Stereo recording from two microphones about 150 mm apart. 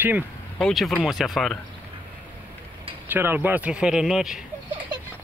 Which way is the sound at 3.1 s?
15° right (ahead or behind).